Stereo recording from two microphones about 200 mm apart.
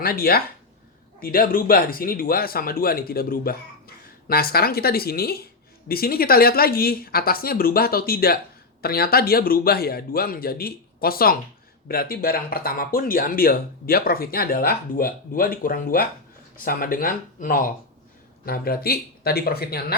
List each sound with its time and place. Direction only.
0.0 s speech: 50° left (ahead or behind)